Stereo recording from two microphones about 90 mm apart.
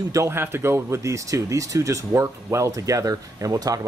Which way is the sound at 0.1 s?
30° right (ahead or behind).